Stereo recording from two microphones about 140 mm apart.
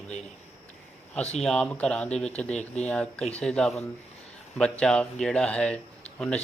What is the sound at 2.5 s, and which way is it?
Speech, 55° left (ahead or behind).